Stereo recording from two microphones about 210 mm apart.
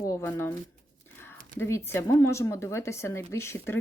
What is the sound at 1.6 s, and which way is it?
Speech, 10° left (ahead or behind).